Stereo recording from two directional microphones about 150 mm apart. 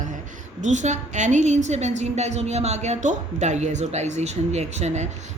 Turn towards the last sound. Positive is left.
turn(degrees=-50)  # may be behind; listen again after turning